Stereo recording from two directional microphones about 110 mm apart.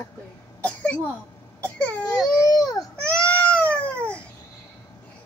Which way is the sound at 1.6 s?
10° left (ahead or behind).